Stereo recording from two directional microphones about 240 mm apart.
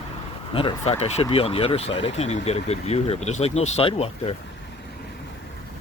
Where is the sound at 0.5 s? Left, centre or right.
Left.